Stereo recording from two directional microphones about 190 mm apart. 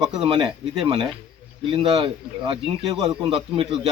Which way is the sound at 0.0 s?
25° right (ahead or behind).